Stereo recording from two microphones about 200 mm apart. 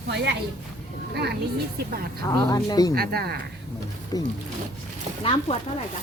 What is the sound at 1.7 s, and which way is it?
Speech, 50° right (ahead or behind).